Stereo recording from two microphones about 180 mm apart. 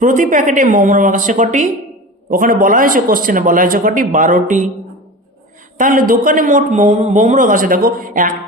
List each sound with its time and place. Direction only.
0.0 s a man's voice: 45° right (ahead or behind)
5.7 s a man's voice: 45° right (ahead or behind)